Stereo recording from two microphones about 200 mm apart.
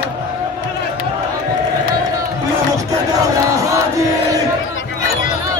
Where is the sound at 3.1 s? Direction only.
15° right (ahead or behind).